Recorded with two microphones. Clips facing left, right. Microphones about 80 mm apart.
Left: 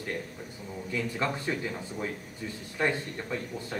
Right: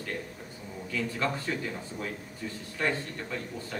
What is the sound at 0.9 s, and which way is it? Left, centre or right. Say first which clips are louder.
Speech: even; left.